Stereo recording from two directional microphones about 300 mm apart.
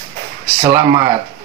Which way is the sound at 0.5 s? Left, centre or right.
Centre.